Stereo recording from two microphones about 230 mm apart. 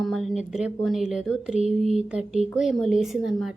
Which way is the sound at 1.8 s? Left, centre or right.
Right.